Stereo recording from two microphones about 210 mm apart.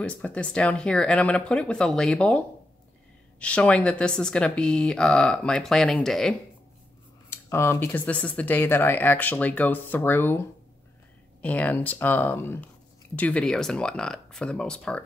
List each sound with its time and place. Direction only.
0.0 s speech: 5° left (ahead or behind)
7.2 s speech: 10° left (ahead or behind)
11.4 s speech: 5° left (ahead or behind)